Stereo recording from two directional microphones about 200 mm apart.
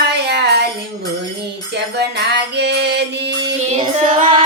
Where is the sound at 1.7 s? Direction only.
55° right (ahead or behind).